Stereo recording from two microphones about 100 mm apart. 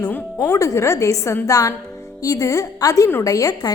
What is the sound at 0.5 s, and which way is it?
A woman's voice, 30° left (ahead or behind).